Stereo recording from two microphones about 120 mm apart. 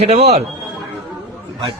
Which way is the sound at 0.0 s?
60° right (ahead or behind).